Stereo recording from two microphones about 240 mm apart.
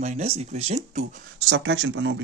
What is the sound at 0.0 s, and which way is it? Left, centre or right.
Speech, right.